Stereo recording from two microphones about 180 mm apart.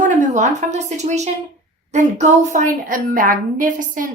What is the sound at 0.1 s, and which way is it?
A woman's voice, 40° right (ahead or behind).